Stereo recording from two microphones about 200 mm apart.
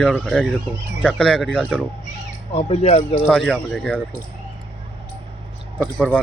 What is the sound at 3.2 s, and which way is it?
Speech, 5° left (ahead or behind).